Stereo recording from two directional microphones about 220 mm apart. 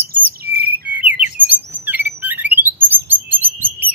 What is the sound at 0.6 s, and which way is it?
Chirp, 45° right (ahead or behind).